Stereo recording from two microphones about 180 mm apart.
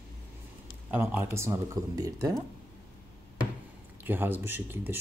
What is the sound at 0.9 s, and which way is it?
Speech, 10° right (ahead or behind).